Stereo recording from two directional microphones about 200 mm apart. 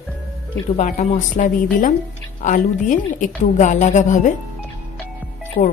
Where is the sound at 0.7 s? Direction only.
35° left (ahead or behind).